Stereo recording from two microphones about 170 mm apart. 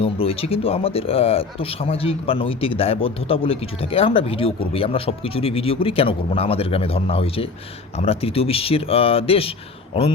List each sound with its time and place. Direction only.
0.0 s speech: 35° left (ahead or behind)